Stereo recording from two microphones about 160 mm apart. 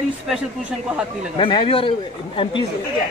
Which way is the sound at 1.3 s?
30° left (ahead or behind).